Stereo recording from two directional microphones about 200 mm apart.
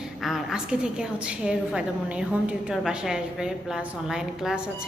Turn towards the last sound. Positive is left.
turn(degrees=-5)  # may be behind; listen again after turning